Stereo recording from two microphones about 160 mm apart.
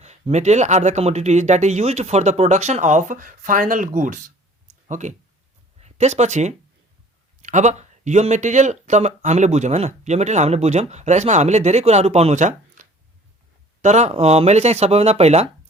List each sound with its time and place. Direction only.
0.0 s speech: 45° right (ahead or behind)